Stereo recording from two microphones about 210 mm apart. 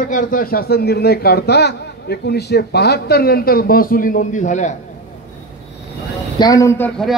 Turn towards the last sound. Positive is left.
turn(degrees=15)  # may be behind; listen again after turning